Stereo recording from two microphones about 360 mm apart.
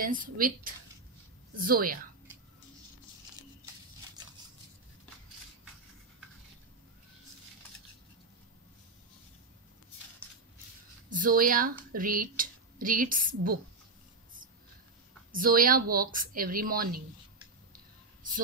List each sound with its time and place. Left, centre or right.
0.0 s speech: right
1.6 s speech: right
11.1 s speech: right
15.3 s speech: right